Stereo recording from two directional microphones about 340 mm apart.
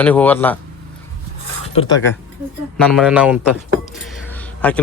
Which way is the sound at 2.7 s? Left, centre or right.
Centre.